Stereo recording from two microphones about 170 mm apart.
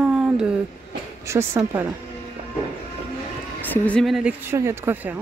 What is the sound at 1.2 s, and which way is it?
Speech, 15° right (ahead or behind).